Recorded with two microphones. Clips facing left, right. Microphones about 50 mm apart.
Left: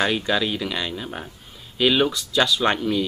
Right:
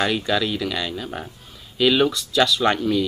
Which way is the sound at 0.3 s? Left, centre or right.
Centre.